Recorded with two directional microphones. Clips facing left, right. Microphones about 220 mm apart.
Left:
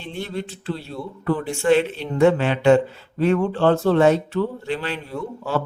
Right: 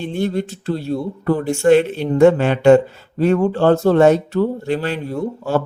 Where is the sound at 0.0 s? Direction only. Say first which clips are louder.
Right 8 dB; 45° right (ahead or behind).